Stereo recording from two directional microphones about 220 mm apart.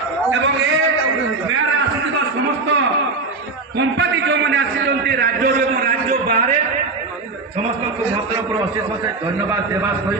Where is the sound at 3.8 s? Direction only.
55° right (ahead or behind); by 6.5 s 35° right (ahead or behind).